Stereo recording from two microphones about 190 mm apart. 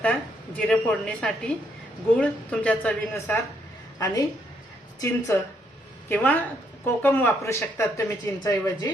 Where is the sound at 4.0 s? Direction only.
20° left (ahead or behind).